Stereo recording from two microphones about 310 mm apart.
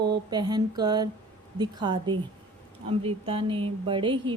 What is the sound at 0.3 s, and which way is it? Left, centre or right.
Speech, centre.